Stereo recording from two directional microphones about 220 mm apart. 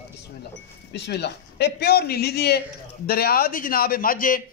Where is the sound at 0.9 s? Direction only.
50° left (ahead or behind).